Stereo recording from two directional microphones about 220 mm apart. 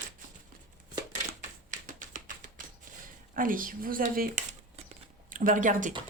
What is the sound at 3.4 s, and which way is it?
A woman's voice, 40° right (ahead or behind).